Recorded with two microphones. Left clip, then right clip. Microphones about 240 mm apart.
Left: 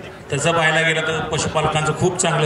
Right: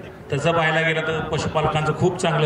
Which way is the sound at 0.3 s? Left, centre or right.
Centre.